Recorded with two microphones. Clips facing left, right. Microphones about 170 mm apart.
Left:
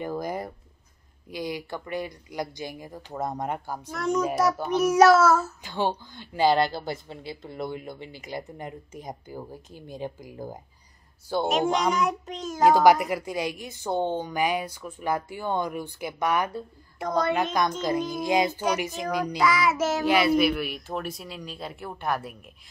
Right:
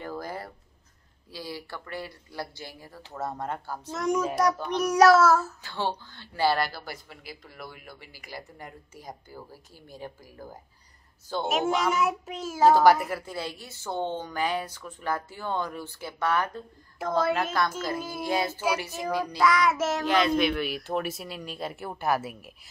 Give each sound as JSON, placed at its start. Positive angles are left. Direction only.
{"t": 0.0, "sound": "a sound", "side_deg": 15}
{"t": 1.3, "sound": "a woman's voice", "side_deg": 20}
{"t": 3.9, "sound": "a child's voice", "side_deg": -15}
{"t": 4.2, "sound": "a child's voice", "side_deg": 5}
{"t": 5.6, "sound": "a woman's voice", "side_deg": 15}
{"t": 11.4, "sound": "a child's voice", "side_deg": -5}
{"t": 12.6, "sound": "a woman's voice", "side_deg": 15}
{"t": 17.0, "sound": "a child's voice", "side_deg": 0}
{"t": 18.2, "sound": "a woman's voice", "side_deg": 15}
{"t": 19.4, "sound": "a child's voice", "side_deg": 0}